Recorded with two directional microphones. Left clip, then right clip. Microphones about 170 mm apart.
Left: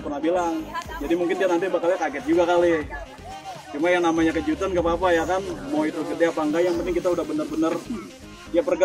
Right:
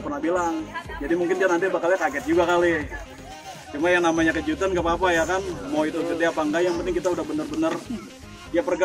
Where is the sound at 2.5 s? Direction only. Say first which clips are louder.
Left 2 dB; 20° left (ahead or behind).